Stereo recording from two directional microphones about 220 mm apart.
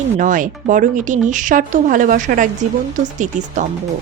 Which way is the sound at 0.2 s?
35° right (ahead or behind).